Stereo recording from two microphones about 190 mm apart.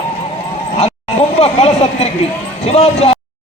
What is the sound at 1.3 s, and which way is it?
Speech, 35° left (ahead or behind).